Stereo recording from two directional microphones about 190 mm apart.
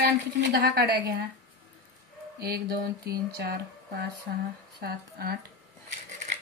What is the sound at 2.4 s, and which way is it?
Speech, 55° right (ahead or behind).